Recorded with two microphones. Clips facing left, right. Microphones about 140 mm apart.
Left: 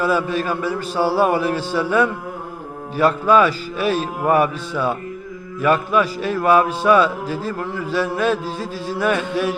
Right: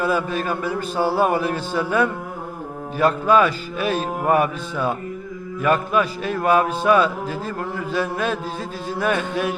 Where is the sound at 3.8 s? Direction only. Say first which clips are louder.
Left 2 dB; 35° left (ahead or behind).